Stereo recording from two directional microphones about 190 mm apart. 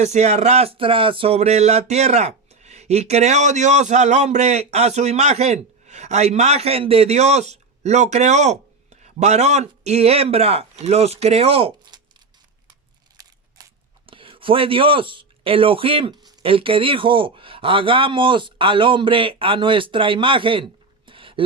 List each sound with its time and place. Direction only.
0.0 s a man's voice: 35° right (ahead or behind)
13.2 s scissors: 20° right (ahead or behind)
14.1 s speech: 25° right (ahead or behind)
21.1 s a sound: 25° right (ahead or behind)